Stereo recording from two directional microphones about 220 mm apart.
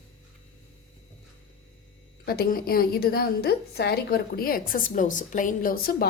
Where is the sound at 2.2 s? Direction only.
40° left (ahead or behind).